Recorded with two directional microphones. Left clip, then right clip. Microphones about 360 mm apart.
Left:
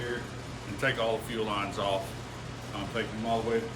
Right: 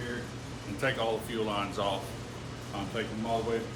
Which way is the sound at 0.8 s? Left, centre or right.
Centre.